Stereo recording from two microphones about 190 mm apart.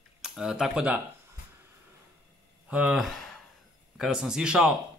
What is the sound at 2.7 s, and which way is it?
Speech, 5° right (ahead or behind).